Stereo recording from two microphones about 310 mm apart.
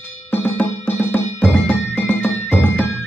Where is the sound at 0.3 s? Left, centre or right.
Centre.